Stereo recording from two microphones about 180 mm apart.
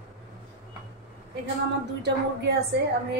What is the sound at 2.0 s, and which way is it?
Speech, 65° right (ahead or behind).